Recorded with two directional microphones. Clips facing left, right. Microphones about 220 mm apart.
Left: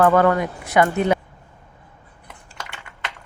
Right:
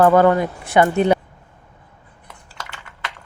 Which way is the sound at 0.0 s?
30° right (ahead or behind).